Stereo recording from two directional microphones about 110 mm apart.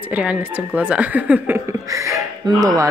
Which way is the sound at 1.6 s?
30° right (ahead or behind).